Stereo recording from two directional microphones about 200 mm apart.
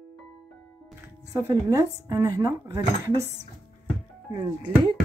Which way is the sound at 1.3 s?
15° right (ahead or behind).